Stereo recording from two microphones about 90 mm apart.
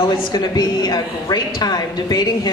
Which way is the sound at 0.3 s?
50° left (ahead or behind).